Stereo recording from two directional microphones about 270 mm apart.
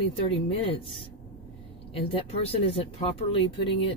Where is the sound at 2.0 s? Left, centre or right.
Left.